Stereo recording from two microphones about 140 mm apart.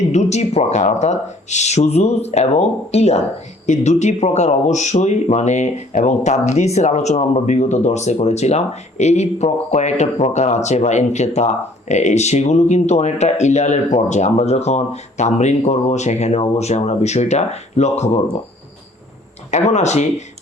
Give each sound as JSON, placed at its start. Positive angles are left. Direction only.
{"t": 0.1, "sound": "speech", "side_deg": 55}
{"t": 19.5, "sound": "speech", "side_deg": 55}